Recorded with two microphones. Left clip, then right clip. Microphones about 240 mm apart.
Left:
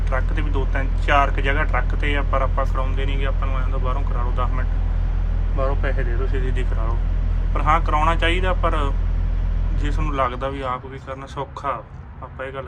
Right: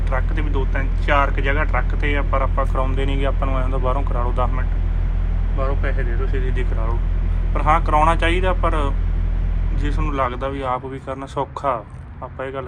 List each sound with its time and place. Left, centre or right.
0.1 s speech: centre
2.7 s speech: centre
5.5 s speech: centre